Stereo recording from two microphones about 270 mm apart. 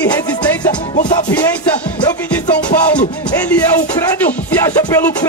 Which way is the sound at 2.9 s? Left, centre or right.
Centre.